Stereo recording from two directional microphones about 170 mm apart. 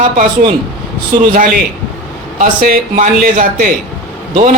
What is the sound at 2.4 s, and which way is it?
A man's voice, 55° right (ahead or behind).